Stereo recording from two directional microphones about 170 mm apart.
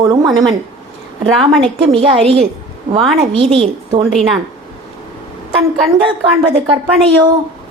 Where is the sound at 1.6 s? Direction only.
30° right (ahead or behind).